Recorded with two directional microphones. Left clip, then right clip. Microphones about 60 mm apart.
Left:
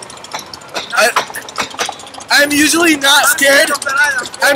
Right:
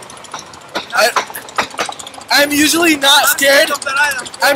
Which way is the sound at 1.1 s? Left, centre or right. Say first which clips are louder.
Even; centre.